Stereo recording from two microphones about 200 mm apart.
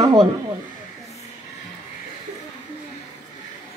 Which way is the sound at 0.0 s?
25° right (ahead or behind).